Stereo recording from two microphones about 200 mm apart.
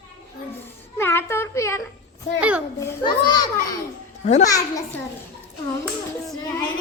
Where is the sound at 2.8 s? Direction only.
20° left (ahead or behind).